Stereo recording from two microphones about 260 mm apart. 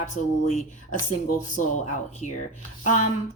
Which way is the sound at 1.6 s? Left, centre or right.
Left.